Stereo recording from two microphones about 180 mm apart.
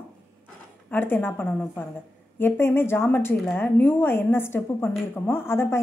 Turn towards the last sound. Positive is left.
turn(degrees=15)  # may be behind; listen again after turning